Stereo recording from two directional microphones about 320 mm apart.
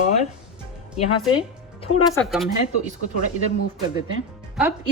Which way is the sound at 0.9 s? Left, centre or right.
Centre.